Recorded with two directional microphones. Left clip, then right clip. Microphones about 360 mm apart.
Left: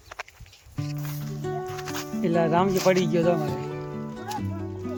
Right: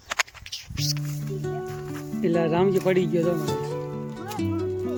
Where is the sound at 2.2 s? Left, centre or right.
Centre.